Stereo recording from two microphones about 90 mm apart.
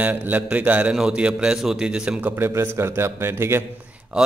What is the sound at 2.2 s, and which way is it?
A man's voice, 30° right (ahead or behind).